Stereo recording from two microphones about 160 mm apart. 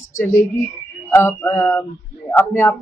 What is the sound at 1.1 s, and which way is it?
Speech, 15° left (ahead or behind).